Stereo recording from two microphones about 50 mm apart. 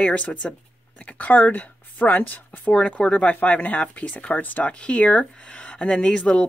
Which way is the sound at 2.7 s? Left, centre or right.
Left.